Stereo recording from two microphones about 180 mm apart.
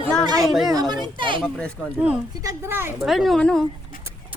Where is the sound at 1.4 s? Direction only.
5° left (ahead or behind).